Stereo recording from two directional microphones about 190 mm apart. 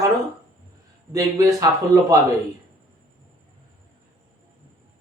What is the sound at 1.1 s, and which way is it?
Speech, 15° right (ahead or behind).